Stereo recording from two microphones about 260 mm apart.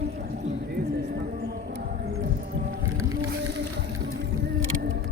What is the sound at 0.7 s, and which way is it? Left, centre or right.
Clip-clop, right.